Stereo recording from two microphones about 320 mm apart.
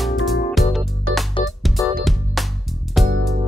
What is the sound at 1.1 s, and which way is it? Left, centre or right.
Music, right.